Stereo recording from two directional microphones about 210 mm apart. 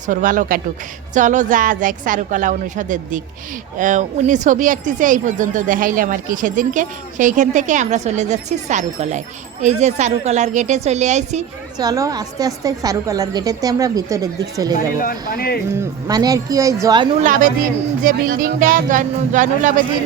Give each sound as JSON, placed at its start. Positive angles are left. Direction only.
{"t": 0.1, "sound": "speech", "side_deg": -40}
{"t": 11.8, "sound": "a woman's voice", "side_deg": -15}
{"t": 15.0, "sound": "speech", "side_deg": 45}
{"t": 16.0, "sound": "a woman's voice", "side_deg": -15}
{"t": 17.2, "sound": "speech", "side_deg": -40}